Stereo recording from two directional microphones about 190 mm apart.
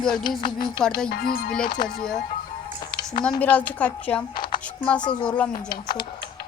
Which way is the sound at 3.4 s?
10° left (ahead or behind).